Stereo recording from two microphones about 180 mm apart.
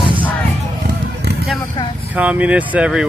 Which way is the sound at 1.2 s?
65° right (ahead or behind).